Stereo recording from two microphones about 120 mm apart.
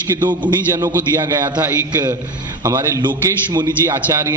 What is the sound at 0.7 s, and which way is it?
A man's voice, 20° right (ahead or behind).